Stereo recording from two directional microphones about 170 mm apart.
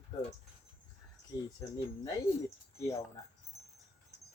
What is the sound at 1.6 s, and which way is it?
Speech, 20° left (ahead or behind).